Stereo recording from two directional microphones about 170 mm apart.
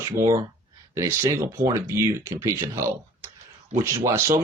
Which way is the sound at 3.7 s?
45° right (ahead or behind).